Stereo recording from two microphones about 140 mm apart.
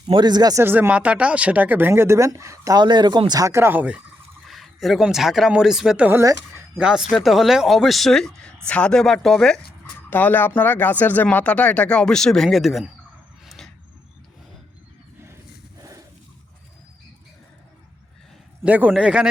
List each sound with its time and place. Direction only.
0.0 s speech: 30° right (ahead or behind)
0.6 s speech: 15° right (ahead or behind)
4.4 s speech: centre (ahead or behind)
6.1 s speech: 15° right (ahead or behind)
6.7 s speech: 5° right (ahead or behind)
13.4 s a sound: centre (ahead or behind)
15.8 s a sound: 25° right (ahead or behind)
18.6 s speech: 10° right (ahead or behind)